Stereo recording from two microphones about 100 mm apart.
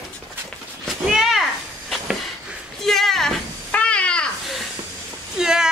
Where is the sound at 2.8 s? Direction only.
5° left (ahead or behind).